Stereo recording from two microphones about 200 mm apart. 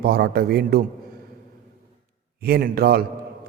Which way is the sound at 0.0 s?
50° right (ahead or behind).